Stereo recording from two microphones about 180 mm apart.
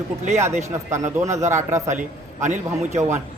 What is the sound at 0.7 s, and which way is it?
Speech, 15° right (ahead or behind).